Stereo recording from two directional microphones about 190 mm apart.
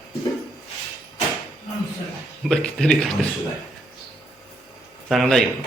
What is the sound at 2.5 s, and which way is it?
Speech, 5° left (ahead or behind).